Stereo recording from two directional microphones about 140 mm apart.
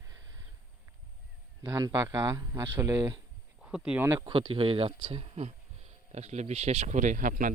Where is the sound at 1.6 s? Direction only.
20° right (ahead or behind).